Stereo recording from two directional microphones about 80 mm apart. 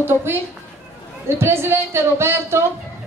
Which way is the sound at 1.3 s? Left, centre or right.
Right.